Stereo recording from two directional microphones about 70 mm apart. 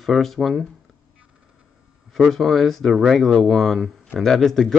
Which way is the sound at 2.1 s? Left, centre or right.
Centre.